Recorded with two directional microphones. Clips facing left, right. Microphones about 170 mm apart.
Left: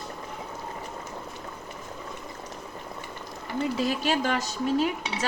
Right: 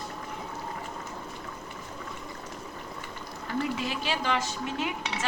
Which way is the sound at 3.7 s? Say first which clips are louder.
Left 6 dB; 40° left (ahead or behind).